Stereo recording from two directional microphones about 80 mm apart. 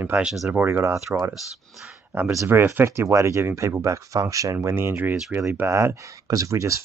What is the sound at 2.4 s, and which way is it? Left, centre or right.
Speech, right.